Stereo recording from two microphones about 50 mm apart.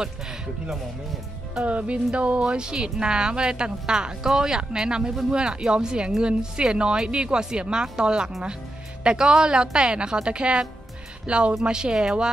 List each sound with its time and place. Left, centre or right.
1.6 s speech: right